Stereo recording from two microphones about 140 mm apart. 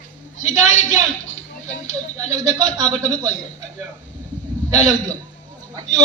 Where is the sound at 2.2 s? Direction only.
55° left (ahead or behind).